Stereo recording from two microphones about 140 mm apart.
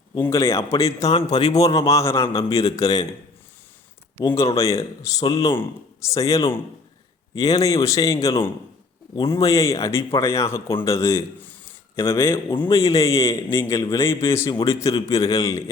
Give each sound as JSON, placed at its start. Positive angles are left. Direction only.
{"t": 0.2, "sound": "a man's voice", "side_deg": 20}
{"t": 4.5, "sound": "a man's voice", "side_deg": 20}